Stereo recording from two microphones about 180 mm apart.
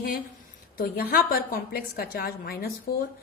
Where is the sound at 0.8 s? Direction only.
55° left (ahead or behind).